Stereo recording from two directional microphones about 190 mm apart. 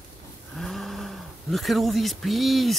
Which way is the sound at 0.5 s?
Centre (ahead or behind).